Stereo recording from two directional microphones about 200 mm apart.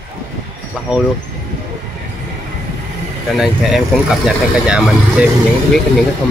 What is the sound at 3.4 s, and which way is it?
Speech, centre (ahead or behind).